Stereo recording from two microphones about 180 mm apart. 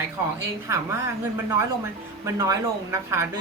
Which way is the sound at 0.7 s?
15° right (ahead or behind).